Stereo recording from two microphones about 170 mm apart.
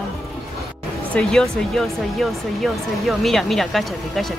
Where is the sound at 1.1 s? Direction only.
5° left (ahead or behind).